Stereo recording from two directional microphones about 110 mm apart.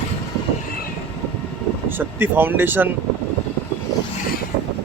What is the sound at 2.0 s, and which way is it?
Speech, 20° right (ahead or behind).